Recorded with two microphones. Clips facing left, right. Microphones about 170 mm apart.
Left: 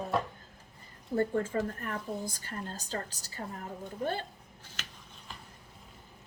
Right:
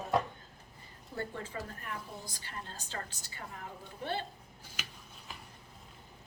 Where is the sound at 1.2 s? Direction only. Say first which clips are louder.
Left 10 dB; 50° left (ahead or behind).